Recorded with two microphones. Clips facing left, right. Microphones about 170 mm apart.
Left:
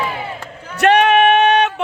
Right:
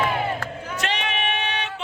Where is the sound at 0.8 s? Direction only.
65° left (ahead or behind).